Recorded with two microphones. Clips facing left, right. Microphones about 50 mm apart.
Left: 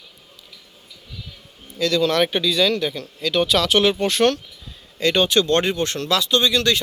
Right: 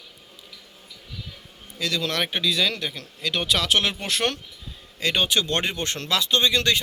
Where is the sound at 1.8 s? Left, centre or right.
Centre.